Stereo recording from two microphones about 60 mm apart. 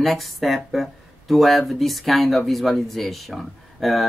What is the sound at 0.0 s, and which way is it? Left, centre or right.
Speech, centre.